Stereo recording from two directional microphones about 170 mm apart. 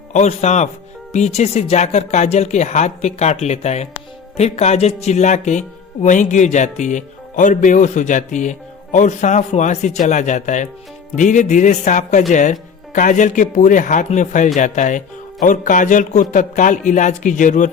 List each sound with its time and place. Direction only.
0.1 s speech: 40° left (ahead or behind)